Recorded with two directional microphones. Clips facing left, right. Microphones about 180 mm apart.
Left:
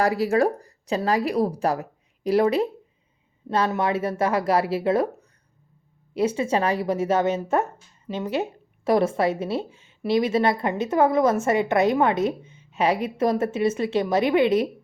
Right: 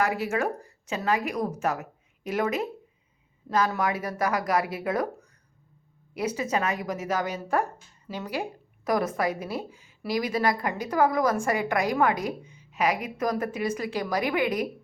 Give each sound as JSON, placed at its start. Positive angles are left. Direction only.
{"t": 0.0, "sound": "a woman's voice", "side_deg": 35}
{"t": 6.1, "sound": "a woman's voice", "side_deg": 30}